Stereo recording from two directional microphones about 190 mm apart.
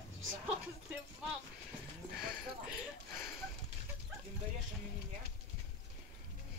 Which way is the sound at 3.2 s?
Centre (ahead or behind).